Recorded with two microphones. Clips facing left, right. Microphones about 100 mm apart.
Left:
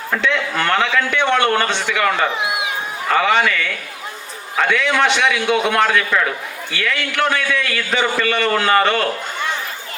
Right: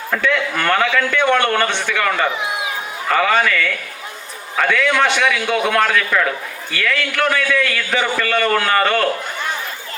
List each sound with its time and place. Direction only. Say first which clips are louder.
0.1 s a man's voice: right 1 dB; 25° left (ahead or behind)